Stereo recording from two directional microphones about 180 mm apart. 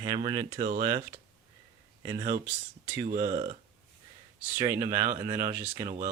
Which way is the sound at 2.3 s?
45° right (ahead or behind).